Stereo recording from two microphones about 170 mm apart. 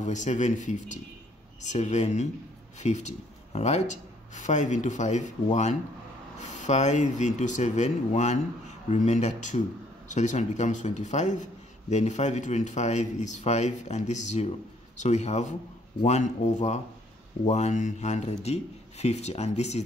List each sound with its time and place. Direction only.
0.0 s speech: 45° left (ahead or behind)